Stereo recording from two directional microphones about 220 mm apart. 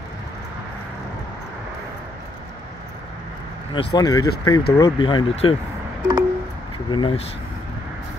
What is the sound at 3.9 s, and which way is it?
Speech, 15° left (ahead or behind).